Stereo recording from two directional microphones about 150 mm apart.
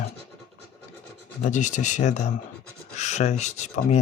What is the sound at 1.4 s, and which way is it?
Speech, 55° left (ahead or behind).